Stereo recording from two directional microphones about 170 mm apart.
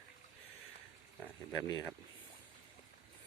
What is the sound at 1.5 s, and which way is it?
Speech, 20° left (ahead or behind).